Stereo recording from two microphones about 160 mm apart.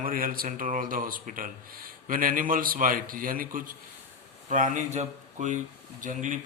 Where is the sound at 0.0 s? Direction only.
60° right (ahead or behind).